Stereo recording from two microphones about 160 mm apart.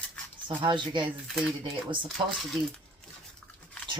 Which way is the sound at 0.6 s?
30° right (ahead or behind).